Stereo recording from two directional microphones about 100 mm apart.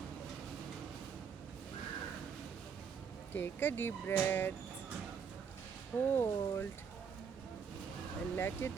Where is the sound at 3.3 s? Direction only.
20° left (ahead or behind).